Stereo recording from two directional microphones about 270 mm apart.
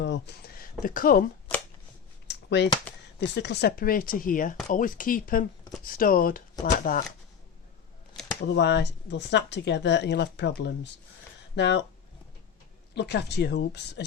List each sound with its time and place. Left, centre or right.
0.0 s speech: left
2.2 s a sound: left
3.2 s speech: left
8.1 s a sound: centre
8.5 s speech: left
12.9 s speech: left